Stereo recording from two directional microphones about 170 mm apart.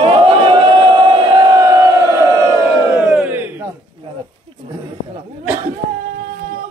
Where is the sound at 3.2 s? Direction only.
10° right (ahead or behind).